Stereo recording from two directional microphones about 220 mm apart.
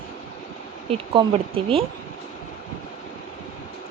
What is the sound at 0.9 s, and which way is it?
Speech, 25° right (ahead or behind).